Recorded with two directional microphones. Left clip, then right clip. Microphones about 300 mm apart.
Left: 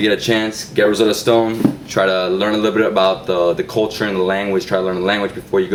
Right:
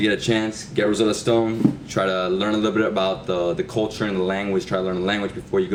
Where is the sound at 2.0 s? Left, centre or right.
Centre.